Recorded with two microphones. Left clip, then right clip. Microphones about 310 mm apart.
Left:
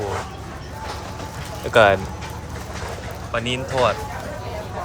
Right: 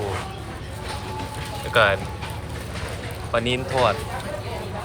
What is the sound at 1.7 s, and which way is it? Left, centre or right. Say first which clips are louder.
Speech: left 4 dB; centre.